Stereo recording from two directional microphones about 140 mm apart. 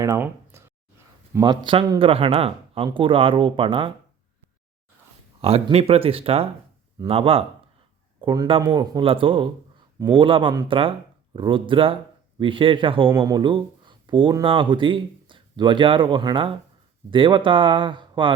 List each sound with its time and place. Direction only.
0.0 s speech: 20° right (ahead or behind); by 3.9 s 35° right (ahead or behind)
5.4 s speech: 45° right (ahead or behind)
13.1 s speech: 20° right (ahead or behind)
13.3 s speech: 35° right (ahead or behind)